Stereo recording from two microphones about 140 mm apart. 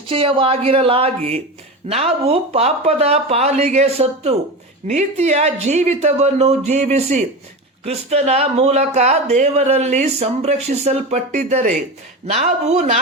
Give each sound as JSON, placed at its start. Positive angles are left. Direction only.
{"t": 0.1, "sound": "speech", "side_deg": -40}